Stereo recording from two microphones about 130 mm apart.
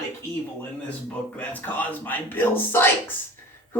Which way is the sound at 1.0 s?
10° left (ahead or behind).